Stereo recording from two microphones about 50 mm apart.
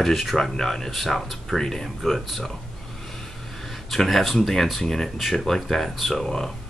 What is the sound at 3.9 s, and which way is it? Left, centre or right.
Speech, centre.